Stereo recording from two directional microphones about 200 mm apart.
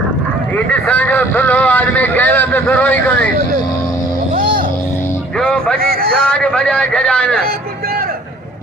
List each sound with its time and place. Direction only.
0.5 s speech: 5° left (ahead or behind)
5.4 s a man's voice: 5° left (ahead or behind)
5.8 s speech: 50° right (ahead or behind)
6.1 s a man's voice: 5° left (ahead or behind)